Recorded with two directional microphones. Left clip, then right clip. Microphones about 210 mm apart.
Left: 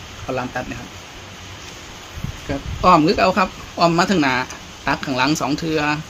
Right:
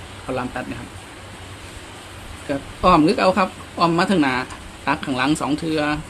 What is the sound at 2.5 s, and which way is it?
Speech, 5° left (ahead or behind).